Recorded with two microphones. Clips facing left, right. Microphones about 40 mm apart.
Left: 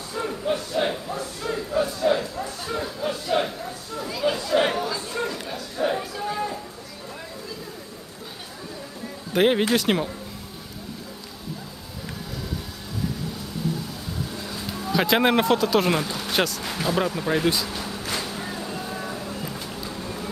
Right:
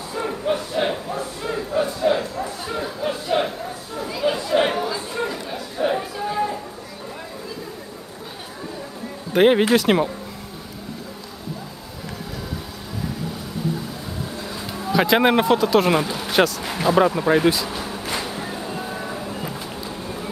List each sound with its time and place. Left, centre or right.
0.1 s a sound: centre
2.7 s chatter: centre
9.3 s speech: centre
13.6 s music: centre
14.3 s vehicle: centre
16.0 s speech: centre
17.6 s vehicle: centre